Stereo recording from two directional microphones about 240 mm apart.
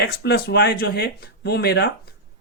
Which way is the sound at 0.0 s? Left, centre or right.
Left.